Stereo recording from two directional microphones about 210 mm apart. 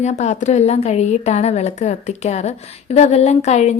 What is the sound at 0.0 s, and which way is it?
A woman's voice, 35° left (ahead or behind).